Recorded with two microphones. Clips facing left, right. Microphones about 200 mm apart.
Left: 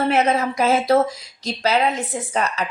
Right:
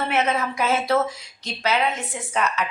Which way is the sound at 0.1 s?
35° left (ahead or behind).